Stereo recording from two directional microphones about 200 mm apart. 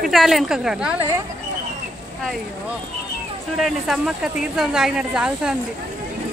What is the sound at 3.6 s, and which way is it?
Speech, centre (ahead or behind).